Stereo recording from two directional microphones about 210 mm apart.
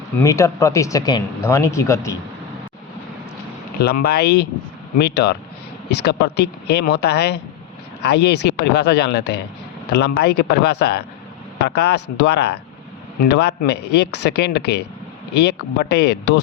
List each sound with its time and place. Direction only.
0.2 s speech: 15° left (ahead or behind)
3.8 s speech: 50° left (ahead or behind)